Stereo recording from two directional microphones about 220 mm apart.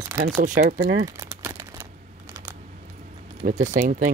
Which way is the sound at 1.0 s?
15° right (ahead or behind).